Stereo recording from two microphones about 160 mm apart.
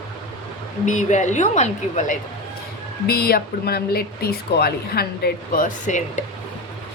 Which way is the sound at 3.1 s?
75° left (ahead or behind).